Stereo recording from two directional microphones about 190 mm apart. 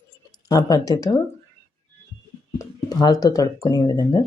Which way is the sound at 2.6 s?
20° left (ahead or behind).